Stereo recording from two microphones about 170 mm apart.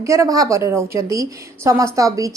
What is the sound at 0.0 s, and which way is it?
Speech, 20° right (ahead or behind).